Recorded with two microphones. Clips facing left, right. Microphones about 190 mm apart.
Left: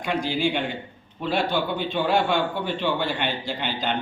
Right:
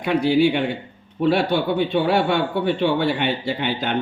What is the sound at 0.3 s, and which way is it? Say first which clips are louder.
A man's voice: right 7 dB; 60° right (ahead or behind).